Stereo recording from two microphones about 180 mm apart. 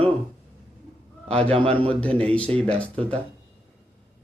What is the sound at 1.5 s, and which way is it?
Speech, 30° right (ahead or behind).